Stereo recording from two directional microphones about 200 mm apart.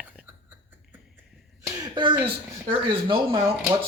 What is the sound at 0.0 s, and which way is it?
Whispering, 5° right (ahead or behind).